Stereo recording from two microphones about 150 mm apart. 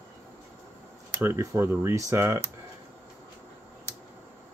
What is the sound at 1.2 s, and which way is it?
Speech, 20° right (ahead or behind).